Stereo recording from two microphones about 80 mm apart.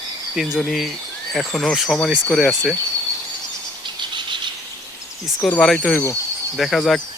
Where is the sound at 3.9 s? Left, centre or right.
Right.